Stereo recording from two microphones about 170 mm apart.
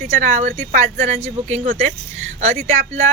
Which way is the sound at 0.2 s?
50° right (ahead or behind).